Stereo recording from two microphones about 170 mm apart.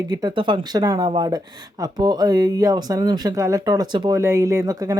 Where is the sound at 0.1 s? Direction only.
25° right (ahead or behind).